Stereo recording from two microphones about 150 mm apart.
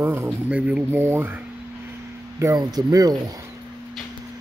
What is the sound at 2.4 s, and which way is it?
Speech, 25° right (ahead or behind).